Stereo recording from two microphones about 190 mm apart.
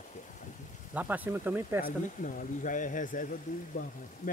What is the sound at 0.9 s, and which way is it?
Speech, 10° right (ahead or behind).